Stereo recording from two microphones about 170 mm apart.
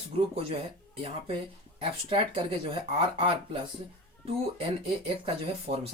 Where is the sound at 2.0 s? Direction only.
30° right (ahead or behind).